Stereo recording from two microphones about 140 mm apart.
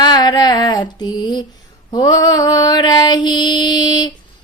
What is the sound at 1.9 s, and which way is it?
Mantra, 30° left (ahead or behind).